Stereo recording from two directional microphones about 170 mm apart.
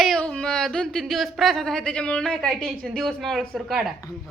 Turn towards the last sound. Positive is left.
turn(degrees=0)  # may be behind; listen again after turning